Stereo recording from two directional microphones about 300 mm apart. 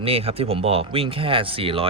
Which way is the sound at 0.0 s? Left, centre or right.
Centre.